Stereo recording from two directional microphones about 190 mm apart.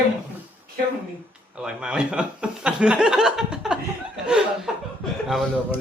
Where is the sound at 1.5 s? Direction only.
5° right (ahead or behind).